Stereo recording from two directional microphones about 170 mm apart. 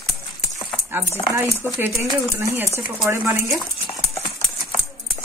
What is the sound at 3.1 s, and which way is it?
Speech, 15° right (ahead or behind).